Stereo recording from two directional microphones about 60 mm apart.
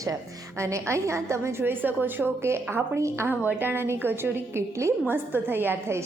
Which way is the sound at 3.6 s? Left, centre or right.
Right.